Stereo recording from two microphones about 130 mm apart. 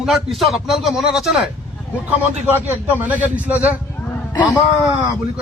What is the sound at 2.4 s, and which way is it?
A man's voice, 15° right (ahead or behind).